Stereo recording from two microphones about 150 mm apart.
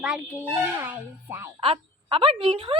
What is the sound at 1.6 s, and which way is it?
A woman's voice, 40° right (ahead or behind).